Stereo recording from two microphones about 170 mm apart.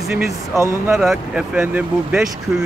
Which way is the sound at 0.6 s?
15° right (ahead or behind).